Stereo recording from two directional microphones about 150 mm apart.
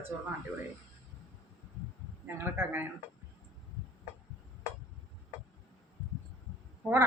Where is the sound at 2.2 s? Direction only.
15° right (ahead or behind).